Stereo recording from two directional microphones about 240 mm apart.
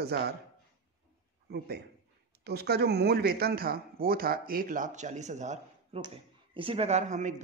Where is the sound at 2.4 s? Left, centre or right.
Right.